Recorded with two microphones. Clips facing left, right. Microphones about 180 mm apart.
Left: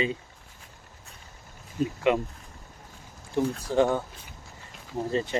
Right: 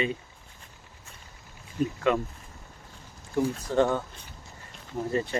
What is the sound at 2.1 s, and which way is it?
Speech, 20° left (ahead or behind).